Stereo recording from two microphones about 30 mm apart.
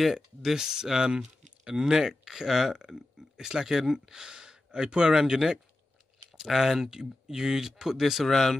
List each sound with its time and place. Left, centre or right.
0.0 s a man's voice: centre; by 5.4 s right
6.3 s speech: centre
8.0 s speech: centre
8.3 s speech: centre